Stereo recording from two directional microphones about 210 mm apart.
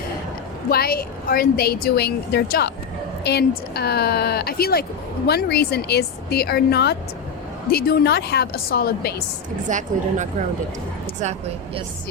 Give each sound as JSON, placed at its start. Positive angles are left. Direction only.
{"t": 0.7, "sound": "speech", "side_deg": 45}
{"t": 3.8, "sound": "speech", "side_deg": 50}
{"t": 9.6, "sound": "a woman's voice", "side_deg": -35}